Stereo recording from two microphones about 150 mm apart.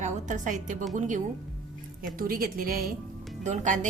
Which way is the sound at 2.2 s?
75° right (ahead or behind).